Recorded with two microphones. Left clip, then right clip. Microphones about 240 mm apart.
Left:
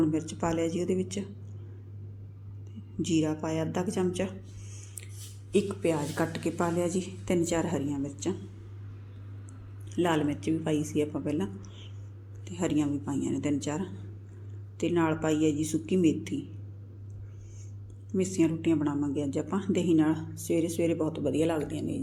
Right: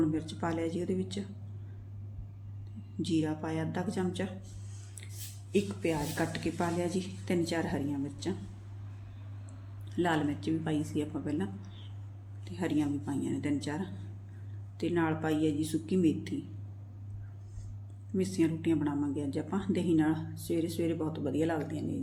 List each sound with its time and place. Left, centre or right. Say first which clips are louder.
0.3 s a woman's voice: left 4 dB; centre
3.0 s a woman's voice: left 4 dB; centre
5.5 s speech: left 4 dB; centre
9.9 s speech: left 3 dB; centre
18.1 s speech: left 3 dB; centre